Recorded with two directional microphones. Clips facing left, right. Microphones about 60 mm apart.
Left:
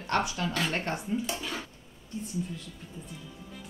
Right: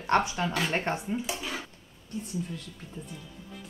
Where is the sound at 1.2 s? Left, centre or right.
Centre.